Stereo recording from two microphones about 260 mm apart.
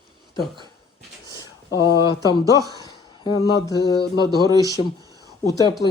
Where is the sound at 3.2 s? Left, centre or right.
Centre.